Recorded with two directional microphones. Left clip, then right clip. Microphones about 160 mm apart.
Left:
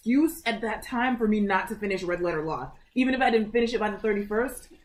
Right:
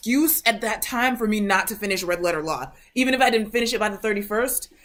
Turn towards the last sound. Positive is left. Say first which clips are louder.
# right 3 dB
turn(degrees=-15)  # may be behind; listen again after turning